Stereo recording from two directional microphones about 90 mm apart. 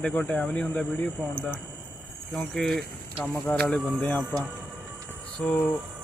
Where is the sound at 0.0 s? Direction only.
15° left (ahead or behind).